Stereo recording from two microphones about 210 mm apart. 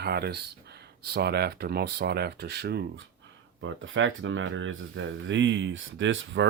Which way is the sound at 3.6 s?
65° right (ahead or behind).